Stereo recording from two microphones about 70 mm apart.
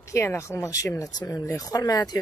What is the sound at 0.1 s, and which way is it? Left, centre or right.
Speech, left.